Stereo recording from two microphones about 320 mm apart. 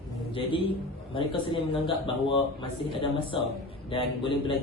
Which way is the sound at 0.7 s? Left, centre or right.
Centre.